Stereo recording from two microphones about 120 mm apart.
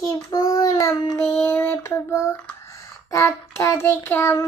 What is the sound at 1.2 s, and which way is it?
Child singing, 15° left (ahead or behind).